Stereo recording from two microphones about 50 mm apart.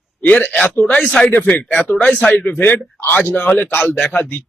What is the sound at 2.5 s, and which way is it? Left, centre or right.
A man's voice, left.